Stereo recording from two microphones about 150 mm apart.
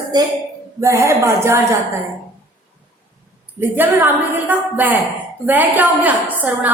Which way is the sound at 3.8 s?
15° right (ahead or behind).